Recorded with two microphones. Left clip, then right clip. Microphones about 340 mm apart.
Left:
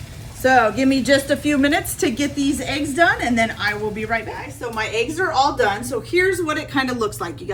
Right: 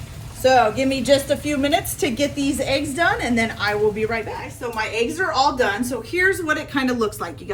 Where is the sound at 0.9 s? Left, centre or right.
Right.